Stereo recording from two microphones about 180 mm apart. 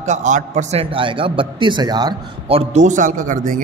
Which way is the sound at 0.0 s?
40° right (ahead or behind).